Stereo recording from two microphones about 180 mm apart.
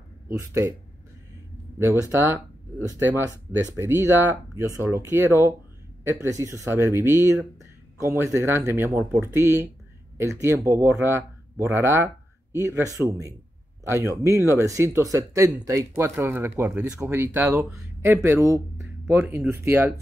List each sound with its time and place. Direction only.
0.3 s speech: 15° right (ahead or behind)
1.8 s speech: 15° right (ahead or behind)